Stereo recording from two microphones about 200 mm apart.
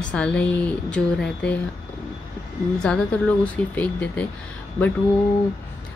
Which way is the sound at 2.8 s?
5° left (ahead or behind).